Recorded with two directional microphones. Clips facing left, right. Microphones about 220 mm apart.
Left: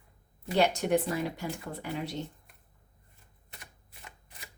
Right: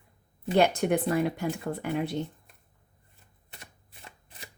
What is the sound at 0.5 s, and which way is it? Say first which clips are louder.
Speech: right 3 dB; 55° right (ahead or behind).